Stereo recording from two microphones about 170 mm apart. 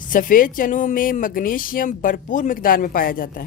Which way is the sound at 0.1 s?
55° left (ahead or behind).